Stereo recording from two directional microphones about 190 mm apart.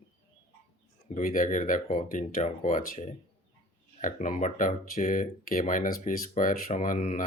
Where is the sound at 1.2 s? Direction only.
45° left (ahead or behind).